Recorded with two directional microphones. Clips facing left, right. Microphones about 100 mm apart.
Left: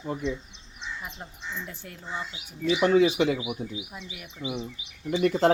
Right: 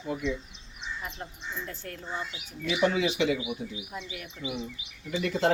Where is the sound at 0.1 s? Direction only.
40° left (ahead or behind).